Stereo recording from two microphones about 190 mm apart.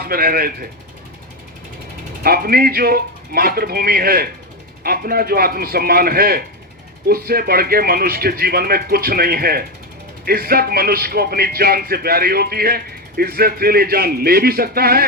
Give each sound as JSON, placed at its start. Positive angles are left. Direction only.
{"t": 0.0, "sound": "speech", "side_deg": -50}
{"t": 2.2, "sound": "speech", "side_deg": -50}